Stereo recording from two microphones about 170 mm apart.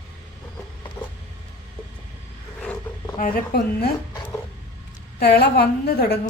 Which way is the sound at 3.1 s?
60° left (ahead or behind).